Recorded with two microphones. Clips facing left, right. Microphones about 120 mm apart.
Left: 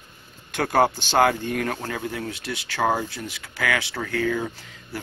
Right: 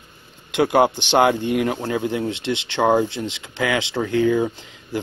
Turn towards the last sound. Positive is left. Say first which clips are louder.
# right 8 dB
turn(degrees=-20)  # may be behind; listen again after turning